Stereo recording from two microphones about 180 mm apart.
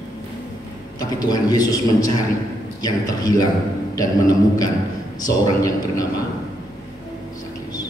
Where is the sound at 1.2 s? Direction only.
20° left (ahead or behind).